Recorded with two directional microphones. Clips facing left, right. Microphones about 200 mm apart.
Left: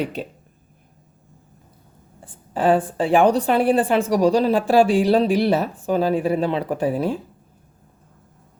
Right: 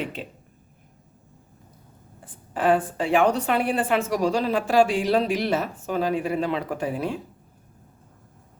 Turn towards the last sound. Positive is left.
turn(degrees=35)  # may be behind; listen again after turning